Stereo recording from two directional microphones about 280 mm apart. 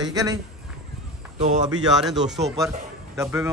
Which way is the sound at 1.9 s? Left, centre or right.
Centre.